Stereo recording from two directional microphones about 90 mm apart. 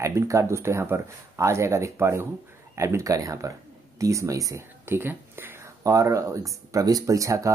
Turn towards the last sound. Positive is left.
turn(degrees=-35)  # may be behind; listen again after turning